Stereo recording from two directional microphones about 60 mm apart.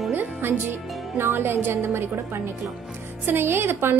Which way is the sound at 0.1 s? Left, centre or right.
Right.